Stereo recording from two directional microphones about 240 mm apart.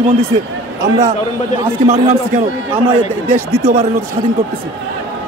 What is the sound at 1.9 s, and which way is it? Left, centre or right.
Speech, right.